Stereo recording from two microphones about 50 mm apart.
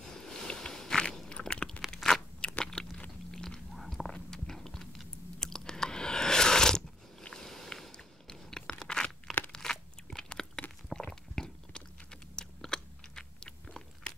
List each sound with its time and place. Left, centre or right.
0.0 s a sound: centre
2.1 s crunch: centre
2.6 s biting: centre
3.3 s chewing: centre
9.5 s crunch: centre
10.9 s chewing: centre